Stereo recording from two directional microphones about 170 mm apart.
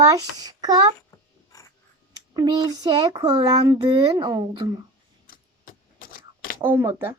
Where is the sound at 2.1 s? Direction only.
25° right (ahead or behind).